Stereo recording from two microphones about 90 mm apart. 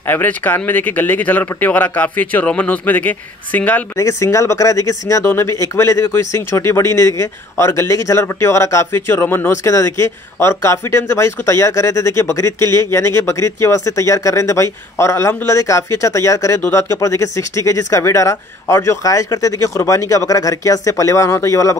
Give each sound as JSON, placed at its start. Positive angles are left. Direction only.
{"t": 0.0, "sound": "speech", "side_deg": 20}
{"t": 3.9, "sound": "speech", "side_deg": 35}
{"t": 5.2, "sound": "speech", "side_deg": 25}